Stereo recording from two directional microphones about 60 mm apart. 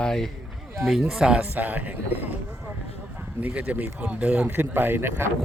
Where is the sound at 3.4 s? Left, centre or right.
Right.